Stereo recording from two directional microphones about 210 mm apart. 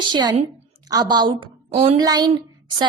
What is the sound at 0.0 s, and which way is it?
A woman's voice, 20° right (ahead or behind).